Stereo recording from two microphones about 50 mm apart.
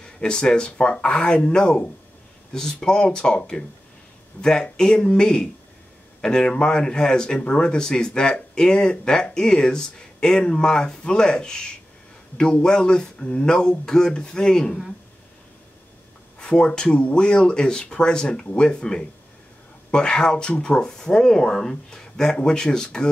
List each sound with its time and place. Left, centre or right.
0.0 s speech: centre
16.3 s speech: centre